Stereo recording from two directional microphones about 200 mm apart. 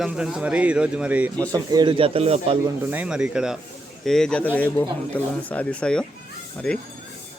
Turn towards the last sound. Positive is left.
turn(degrees=5)  # may be behind; listen again after turning